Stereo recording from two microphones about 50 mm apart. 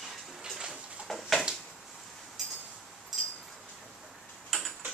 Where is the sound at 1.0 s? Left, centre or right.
Centre.